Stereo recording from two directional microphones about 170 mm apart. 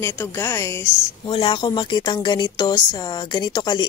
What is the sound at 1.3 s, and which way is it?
Speech, 30° left (ahead or behind).